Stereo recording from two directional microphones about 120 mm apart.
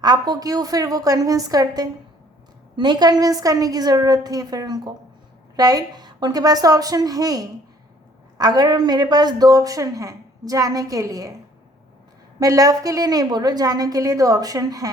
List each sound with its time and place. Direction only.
0.0 s a woman's voice: 35° right (ahead or behind)
12.4 s a woman's voice: 30° right (ahead or behind)